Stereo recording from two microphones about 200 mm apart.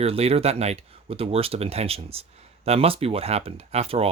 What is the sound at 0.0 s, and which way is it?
Speech, 30° right (ahead or behind).